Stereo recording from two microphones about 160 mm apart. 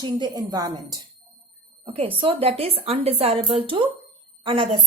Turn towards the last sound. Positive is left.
turn(degrees=-35)  # may be behind; listen again after turning